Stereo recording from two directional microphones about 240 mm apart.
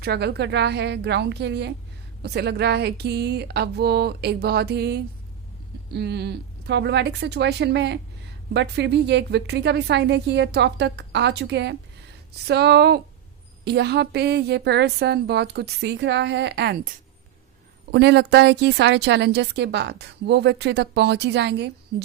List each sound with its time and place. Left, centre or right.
0.0 s a woman's voice: right
17.9 s a woman's voice: right